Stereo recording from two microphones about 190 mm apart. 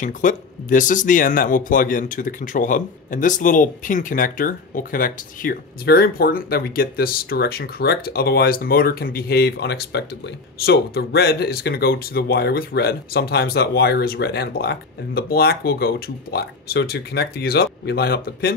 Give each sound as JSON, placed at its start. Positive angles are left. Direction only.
{"t": 0.0, "sound": "speech", "side_deg": 45}